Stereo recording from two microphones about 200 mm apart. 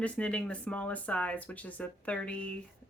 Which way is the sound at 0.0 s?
5° left (ahead or behind).